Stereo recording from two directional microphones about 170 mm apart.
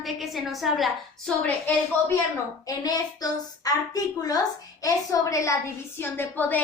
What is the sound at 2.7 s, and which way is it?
A woman's voice, 20° left (ahead or behind).